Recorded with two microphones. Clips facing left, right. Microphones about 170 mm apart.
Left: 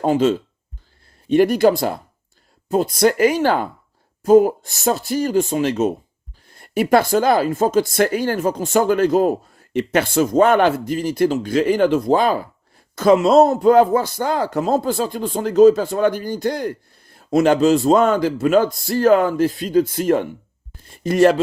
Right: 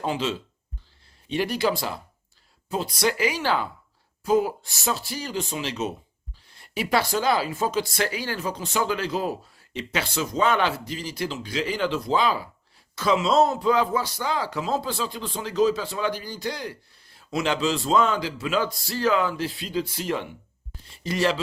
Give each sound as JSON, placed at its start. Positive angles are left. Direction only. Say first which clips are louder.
{"t": 0.0, "sound": "speech", "louder": "left 11 dB", "side_deg": 50}